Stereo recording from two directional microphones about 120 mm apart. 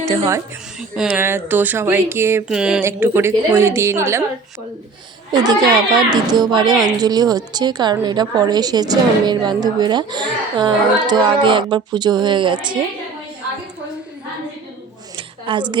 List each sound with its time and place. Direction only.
1.0 s speech: 20° right (ahead or behind)
2.5 s music: 5° right (ahead or behind)
2.8 s speech: 20° right (ahead or behind)
5.3 s a woman's voice: 35° right (ahead or behind)
15.1 s a sound: 45° right (ahead or behind)